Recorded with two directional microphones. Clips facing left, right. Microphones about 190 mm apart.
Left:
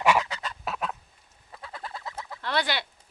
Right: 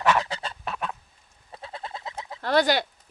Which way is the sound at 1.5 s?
25° right (ahead or behind).